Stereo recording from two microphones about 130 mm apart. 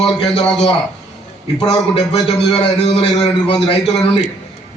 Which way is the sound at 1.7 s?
40° left (ahead or behind).